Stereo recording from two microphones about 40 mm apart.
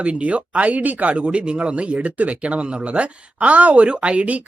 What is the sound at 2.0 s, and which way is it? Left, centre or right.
Speech, right.